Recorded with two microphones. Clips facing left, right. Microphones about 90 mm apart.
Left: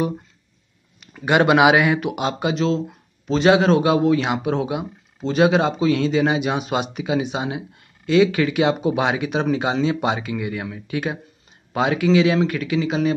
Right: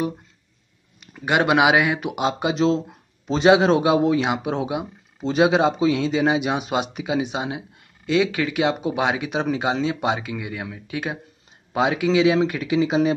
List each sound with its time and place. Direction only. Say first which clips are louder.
1.1 s speech: left 3 dB; 5° right (ahead or behind)
2.5 s a man's voice: right 1 dB; 20° right (ahead or behind)